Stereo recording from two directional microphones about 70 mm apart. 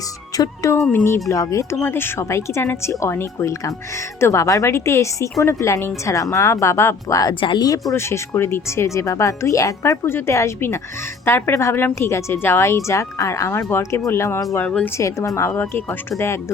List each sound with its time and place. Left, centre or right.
0.3 s speech: left
0.9 s speech: left
1.3 s speech: left
1.8 s speech: left
7.2 s speech: left
7.9 s speech: left
10.1 s speech: left
11.3 s speech: left
11.5 s speech: left
15.7 s speech: left